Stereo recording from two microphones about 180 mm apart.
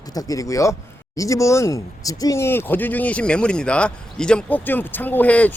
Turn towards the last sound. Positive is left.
turn(degrees=10)  # may be behind; listen again after turning